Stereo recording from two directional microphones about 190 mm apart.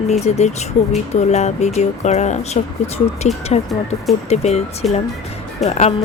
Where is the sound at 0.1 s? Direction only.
35° left (ahead or behind).